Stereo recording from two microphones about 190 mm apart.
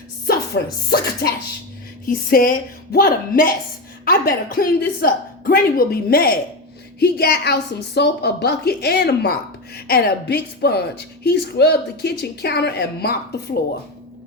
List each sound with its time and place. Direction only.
0.3 s a woman's voice: 55° left (ahead or behind)